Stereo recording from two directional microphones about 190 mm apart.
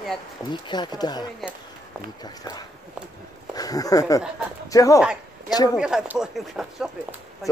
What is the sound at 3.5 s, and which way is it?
Speech, 20° left (ahead or behind).